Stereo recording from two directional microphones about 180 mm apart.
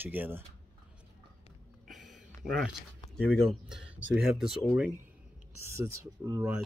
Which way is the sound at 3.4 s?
5° right (ahead or behind).